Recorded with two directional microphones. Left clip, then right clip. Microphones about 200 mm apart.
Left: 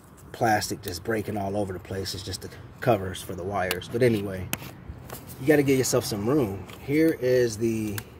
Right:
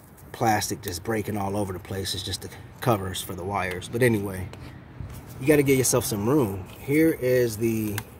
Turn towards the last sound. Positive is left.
turn(degrees=-20)  # may be behind; listen again after turning